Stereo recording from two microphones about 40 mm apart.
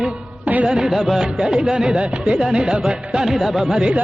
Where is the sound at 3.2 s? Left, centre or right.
Centre.